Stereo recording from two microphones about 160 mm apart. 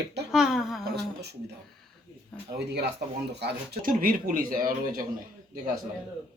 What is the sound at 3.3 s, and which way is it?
A man's voice, 90° right.